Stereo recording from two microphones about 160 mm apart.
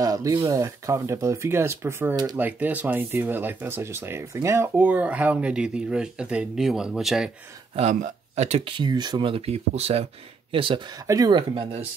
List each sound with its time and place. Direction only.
0.0 s speech: 20° right (ahead or behind); by 7.2 s 5° right (ahead or behind)
7.9 s speech: 50° right (ahead or behind); by 11.8 s 30° right (ahead or behind)